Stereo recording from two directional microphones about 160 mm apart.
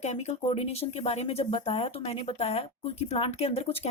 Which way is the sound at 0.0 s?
45° left (ahead or behind).